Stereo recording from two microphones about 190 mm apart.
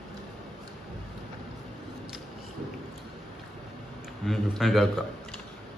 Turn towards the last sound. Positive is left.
turn(degrees=0)  # may be behind; listen again after turning